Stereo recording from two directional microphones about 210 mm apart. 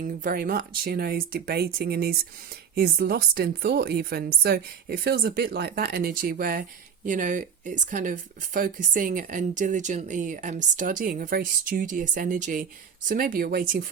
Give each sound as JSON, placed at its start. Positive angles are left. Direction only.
{"t": 0.0, "sound": "speech", "side_deg": -40}